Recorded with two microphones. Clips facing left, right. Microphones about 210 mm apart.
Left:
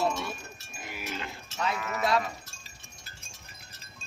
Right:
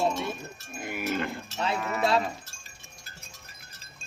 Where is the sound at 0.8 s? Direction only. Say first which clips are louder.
Right 8 dB; 50° right (ahead or behind).